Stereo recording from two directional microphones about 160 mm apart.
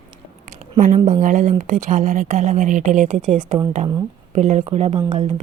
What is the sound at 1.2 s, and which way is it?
Speech, 50° right (ahead or behind).